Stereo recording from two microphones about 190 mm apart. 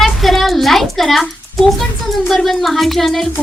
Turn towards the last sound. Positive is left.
turn(degrees=0)  # may be behind; listen again after turning